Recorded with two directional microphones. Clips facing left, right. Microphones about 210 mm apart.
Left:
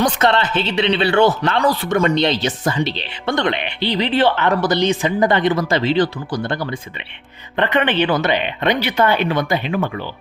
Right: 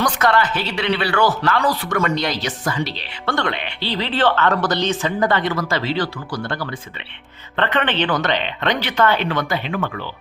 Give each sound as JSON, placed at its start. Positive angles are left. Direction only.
{"t": 0.0, "sound": "speech", "side_deg": 25}